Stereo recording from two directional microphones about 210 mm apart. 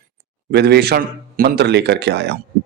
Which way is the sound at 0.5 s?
50° right (ahead or behind).